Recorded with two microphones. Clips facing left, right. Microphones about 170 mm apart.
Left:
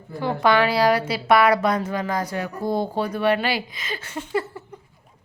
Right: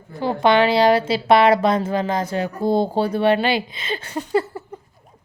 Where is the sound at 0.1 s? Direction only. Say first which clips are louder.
Right 3 dB; 20° right (ahead or behind); by 4.6 s 40° right (ahead or behind).